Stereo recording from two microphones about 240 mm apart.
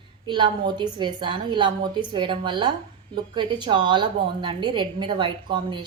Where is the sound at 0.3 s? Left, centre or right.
Centre.